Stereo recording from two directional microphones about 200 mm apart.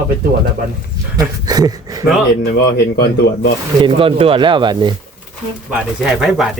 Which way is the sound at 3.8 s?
25° right (ahead or behind).